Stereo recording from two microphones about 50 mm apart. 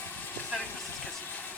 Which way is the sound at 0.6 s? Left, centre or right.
Left.